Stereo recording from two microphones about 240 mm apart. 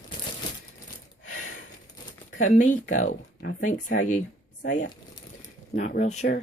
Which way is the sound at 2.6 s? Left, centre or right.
Left.